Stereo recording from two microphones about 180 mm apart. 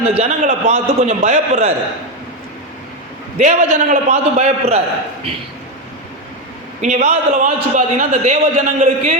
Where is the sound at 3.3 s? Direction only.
45° right (ahead or behind).